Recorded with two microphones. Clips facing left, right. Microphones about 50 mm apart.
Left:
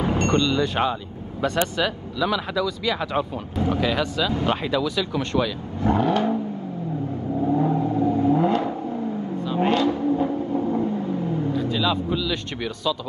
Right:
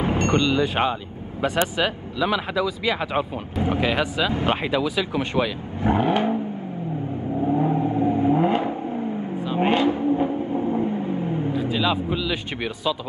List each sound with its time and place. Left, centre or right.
0.3 s speech: centre
7.3 s accelerating: centre